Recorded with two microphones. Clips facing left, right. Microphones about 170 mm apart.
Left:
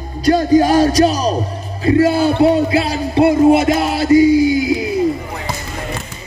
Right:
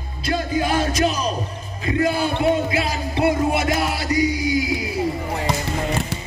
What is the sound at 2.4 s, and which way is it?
Music, 30° left (ahead or behind).